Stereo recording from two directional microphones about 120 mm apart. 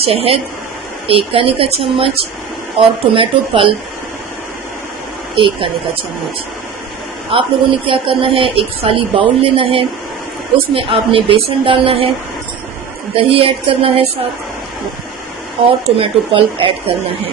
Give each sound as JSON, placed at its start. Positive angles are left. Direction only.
{"t": 0.0, "sound": "speech", "side_deg": -55}
{"t": 5.3, "sound": "speech", "side_deg": -45}
{"t": 7.3, "sound": "speech", "side_deg": -45}
{"t": 13.1, "sound": "speech", "side_deg": -50}
{"t": 16.0, "sound": "speech", "side_deg": -50}